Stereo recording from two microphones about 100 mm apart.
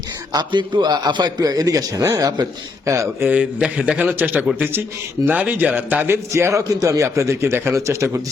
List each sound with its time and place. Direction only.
0.3 s a man's voice: 50° right (ahead or behind); by 3.2 s 30° right (ahead or behind)
3.2 s a man's voice: 15° right (ahead or behind)
6.3 s a man's voice: 30° right (ahead or behind)